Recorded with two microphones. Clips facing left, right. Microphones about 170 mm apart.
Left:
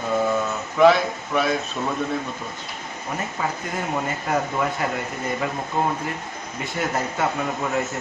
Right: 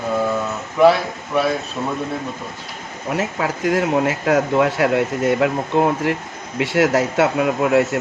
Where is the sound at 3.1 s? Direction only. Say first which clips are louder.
Right 6 dB; 90° right.